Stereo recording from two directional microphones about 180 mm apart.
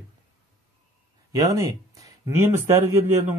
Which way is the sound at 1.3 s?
20° right (ahead or behind).